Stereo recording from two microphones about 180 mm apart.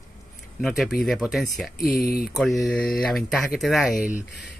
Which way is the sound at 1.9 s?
55° left (ahead or behind).